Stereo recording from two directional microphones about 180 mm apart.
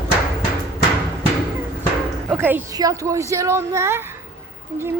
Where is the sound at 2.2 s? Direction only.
10° right (ahead or behind).